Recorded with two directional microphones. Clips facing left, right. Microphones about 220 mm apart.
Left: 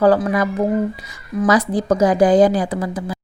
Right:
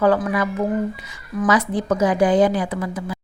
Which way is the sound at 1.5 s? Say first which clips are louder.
Left 3 dB; 35° left (ahead or behind).